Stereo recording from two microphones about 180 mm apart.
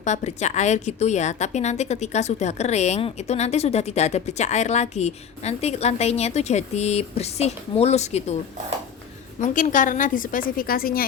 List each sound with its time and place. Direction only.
0.0 s a woman's voice: 40° left (ahead or behind)
9.4 s a woman's voice: 45° left (ahead or behind)